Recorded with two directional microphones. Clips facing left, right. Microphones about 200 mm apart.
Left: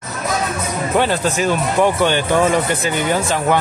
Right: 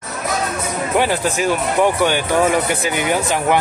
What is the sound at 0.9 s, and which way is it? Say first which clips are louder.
Speech: left 1 dB; 10° right (ahead or behind).